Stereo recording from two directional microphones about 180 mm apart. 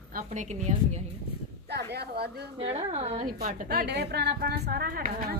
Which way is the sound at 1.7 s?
65° right (ahead or behind).